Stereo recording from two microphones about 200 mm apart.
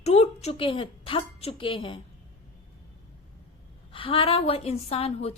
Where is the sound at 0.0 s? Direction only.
30° left (ahead or behind).